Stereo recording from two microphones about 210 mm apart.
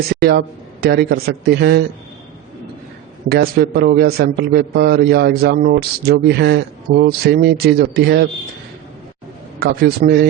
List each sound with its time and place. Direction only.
0.1 s a man's voice: 50° right (ahead or behind)
3.2 s a man's voice: 50° right (ahead or behind)
9.6 s a man's voice: 50° right (ahead or behind)